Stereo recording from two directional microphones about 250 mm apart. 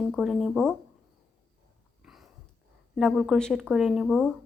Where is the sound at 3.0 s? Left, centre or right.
Centre.